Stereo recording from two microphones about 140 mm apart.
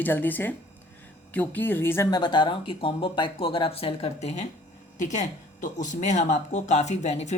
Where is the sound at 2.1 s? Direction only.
30° left (ahead or behind).